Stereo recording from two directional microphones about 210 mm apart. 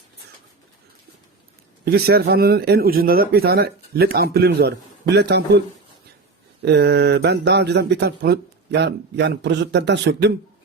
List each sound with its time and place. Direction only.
1.8 s a man's voice: 50° right (ahead or behind)
6.7 s speech: 50° right (ahead or behind)